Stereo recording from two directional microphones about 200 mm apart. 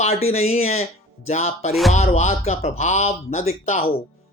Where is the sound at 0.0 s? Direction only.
30° left (ahead or behind).